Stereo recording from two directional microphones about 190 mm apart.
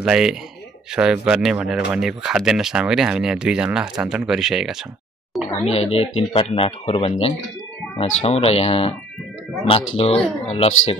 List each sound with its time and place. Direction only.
0.0 s speech: 5° right (ahead or behind)
5.7 s speech: 30° left (ahead or behind)
9.9 s speech: 30° left (ahead or behind)